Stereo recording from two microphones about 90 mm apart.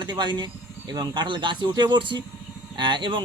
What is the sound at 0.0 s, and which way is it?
Speech, 55° right (ahead or behind).